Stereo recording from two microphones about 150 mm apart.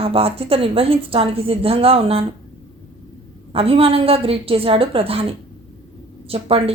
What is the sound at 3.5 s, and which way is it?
A woman's voice, 40° right (ahead or behind).